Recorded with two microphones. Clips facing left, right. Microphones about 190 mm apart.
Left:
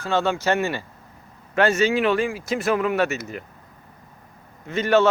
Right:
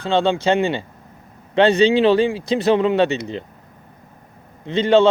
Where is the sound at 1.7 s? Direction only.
30° right (ahead or behind).